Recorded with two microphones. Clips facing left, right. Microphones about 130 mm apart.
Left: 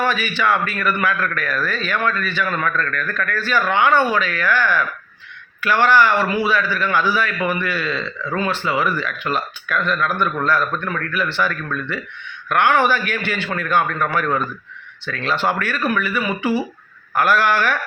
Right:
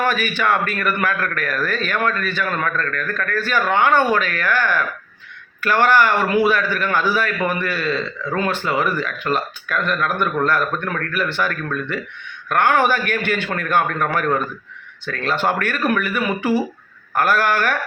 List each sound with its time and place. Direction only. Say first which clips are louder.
0.0 s a man's voice: even; 50° right (ahead or behind)